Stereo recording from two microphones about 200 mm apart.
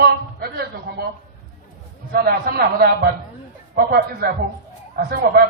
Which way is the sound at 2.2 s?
50° right (ahead or behind).